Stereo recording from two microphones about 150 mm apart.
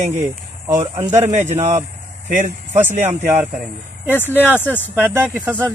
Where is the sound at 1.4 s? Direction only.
50° right (ahead or behind).